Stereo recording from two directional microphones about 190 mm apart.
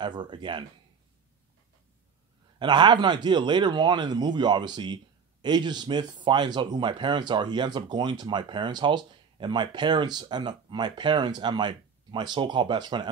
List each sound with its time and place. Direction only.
0.0 s speech: 25° right (ahead or behind)
2.6 s speech: 25° right (ahead or behind)